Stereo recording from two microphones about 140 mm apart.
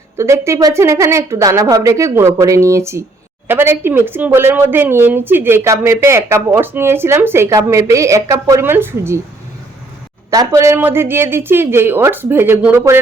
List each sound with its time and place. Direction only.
0.2 s speech: 20° right (ahead or behind)
10.3 s speech: 25° right (ahead or behind)